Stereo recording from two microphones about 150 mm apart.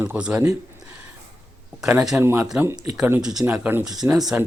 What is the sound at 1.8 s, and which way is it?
Speech, 5° right (ahead or behind).